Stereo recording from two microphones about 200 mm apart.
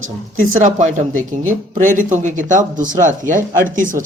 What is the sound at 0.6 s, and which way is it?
Speech, 40° right (ahead or behind).